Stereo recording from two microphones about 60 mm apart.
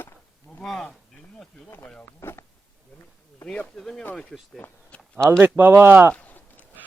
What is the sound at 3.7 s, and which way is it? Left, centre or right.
Speech, centre.